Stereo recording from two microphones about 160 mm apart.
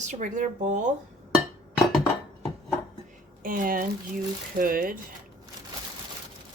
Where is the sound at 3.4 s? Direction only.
60° right (ahead or behind).